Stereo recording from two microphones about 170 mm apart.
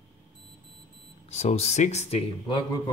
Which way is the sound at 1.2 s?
40° left (ahead or behind).